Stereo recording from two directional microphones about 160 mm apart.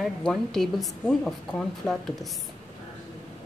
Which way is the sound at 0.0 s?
5° left (ahead or behind).